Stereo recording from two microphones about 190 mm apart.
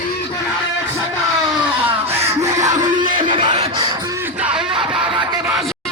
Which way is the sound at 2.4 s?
20° right (ahead or behind).